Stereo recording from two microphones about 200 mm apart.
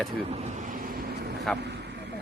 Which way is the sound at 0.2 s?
30° right (ahead or behind).